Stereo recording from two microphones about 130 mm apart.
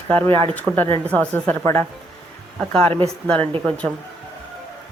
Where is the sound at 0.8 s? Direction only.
45° right (ahead or behind).